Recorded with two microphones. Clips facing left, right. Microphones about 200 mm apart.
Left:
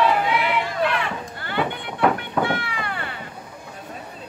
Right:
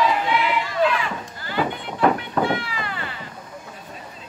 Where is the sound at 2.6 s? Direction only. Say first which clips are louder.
Left 1 dB; 55° left (ahead or behind).